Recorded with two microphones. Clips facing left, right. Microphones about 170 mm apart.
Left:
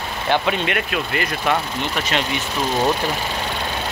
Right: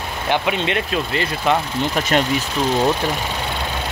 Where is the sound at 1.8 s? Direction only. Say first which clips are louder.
Right 4 dB; 45° right (ahead or behind).